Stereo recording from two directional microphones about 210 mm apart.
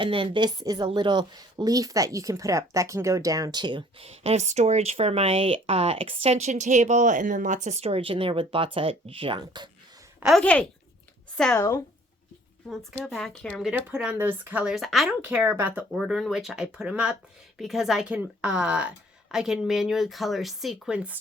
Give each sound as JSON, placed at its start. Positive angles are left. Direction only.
{"t": 0.0, "sound": "a woman's voice", "side_deg": -25}
{"t": 10.2, "sound": "speech", "side_deg": 0}
{"t": 13.1, "sound": "speech", "side_deg": 0}